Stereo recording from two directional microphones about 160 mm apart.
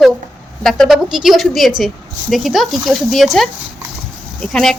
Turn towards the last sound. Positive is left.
turn(degrees=5)  # may be behind; listen again after turning